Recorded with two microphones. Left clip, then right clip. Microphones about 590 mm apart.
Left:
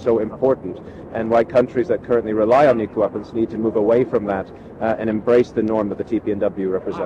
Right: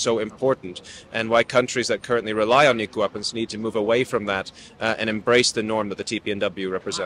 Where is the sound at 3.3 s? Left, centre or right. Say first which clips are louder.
Left 6 dB; right.